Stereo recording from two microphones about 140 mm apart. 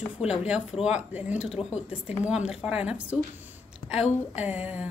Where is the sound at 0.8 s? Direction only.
10° right (ahead or behind).